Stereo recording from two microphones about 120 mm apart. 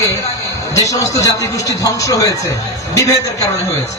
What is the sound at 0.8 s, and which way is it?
A man's voice, 30° left (ahead or behind).